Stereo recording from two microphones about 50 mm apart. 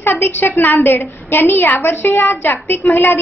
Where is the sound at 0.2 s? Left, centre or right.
Left.